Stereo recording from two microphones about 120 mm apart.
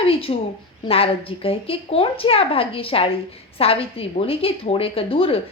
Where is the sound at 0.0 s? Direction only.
50° left (ahead or behind).